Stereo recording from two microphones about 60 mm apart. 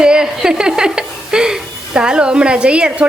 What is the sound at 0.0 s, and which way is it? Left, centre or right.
Speech, centre.